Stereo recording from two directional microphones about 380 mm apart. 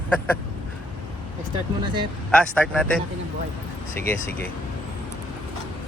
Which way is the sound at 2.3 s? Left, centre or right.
Centre.